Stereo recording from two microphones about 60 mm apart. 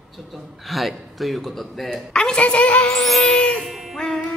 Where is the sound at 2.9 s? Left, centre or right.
Centre.